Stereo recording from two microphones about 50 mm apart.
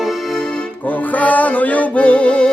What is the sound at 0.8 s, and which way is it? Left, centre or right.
Music, left.